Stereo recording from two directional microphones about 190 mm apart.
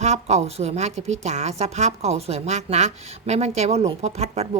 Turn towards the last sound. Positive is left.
turn(degrees=-35)  # may be behind; listen again after turning